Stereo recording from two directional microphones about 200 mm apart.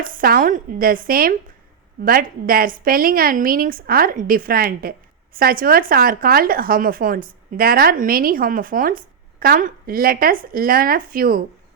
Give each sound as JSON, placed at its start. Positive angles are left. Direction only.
{"t": 0.0, "sound": "a woman's voice", "side_deg": -45}